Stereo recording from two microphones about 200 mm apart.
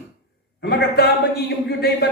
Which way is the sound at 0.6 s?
55° left (ahead or behind).